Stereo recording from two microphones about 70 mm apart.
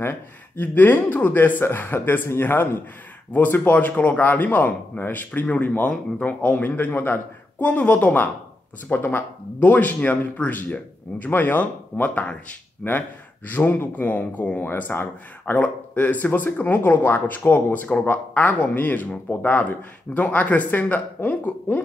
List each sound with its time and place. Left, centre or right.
0.0 s speech: left